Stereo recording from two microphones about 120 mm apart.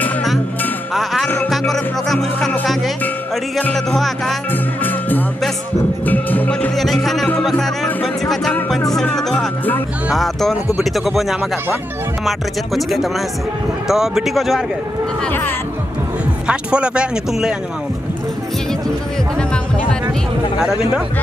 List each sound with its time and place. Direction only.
0.9 s music: centre (ahead or behind)
3.6 s speech: 5° left (ahead or behind)
4.5 s music: 15° left (ahead or behind)
6.7 s music: centre (ahead or behind)
7.2 s speech: 5° left (ahead or behind)
15.2 s speech: 15° left (ahead or behind)
16.4 s speech: 10° right (ahead or behind)
19.3 s music: 5° left (ahead or behind)